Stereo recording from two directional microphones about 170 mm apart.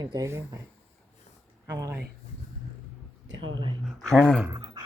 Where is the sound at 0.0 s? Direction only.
20° right (ahead or behind).